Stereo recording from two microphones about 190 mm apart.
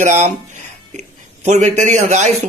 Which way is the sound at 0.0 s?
40° right (ahead or behind).